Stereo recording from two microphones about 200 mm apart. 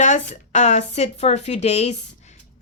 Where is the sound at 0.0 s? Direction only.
35° left (ahead or behind).